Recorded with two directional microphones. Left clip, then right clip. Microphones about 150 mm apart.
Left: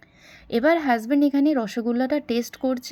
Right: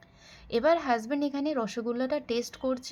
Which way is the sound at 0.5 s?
35° left (ahead or behind).